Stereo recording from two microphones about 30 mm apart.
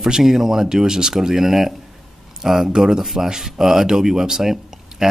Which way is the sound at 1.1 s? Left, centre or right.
Centre.